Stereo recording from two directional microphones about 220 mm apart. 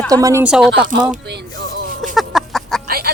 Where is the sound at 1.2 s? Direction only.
50° right (ahead or behind).